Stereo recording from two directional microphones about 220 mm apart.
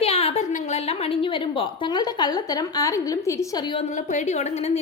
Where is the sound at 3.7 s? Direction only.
30° left (ahead or behind).